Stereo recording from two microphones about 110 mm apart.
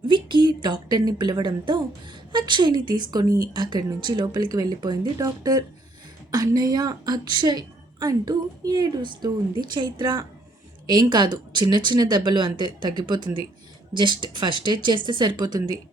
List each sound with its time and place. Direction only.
0.1 s a woman's voice: 45° right (ahead or behind)